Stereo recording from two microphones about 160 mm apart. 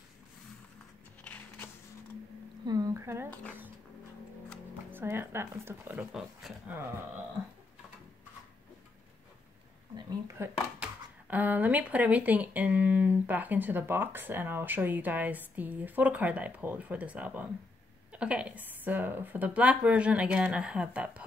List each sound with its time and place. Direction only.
1.2 s a sound: 10° left (ahead or behind)
2.6 s a sound: 25° right (ahead or behind)
4.9 s speech: 15° right (ahead or behind)
6.5 s speech: centre (ahead or behind)
9.9 s speech: 20° right (ahead or behind)
10.8 s speech: 10° right (ahead or behind)